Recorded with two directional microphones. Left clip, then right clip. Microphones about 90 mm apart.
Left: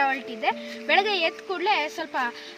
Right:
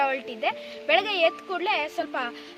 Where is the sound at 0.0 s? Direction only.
70° right (ahead or behind).